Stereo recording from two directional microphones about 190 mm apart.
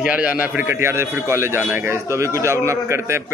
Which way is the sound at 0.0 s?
5° right (ahead or behind).